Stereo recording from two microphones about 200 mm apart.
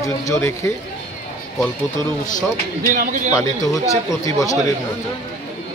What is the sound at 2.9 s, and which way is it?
Speech, 40° right (ahead or behind).